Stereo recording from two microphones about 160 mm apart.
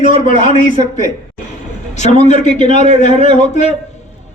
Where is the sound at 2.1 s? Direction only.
45° left (ahead or behind).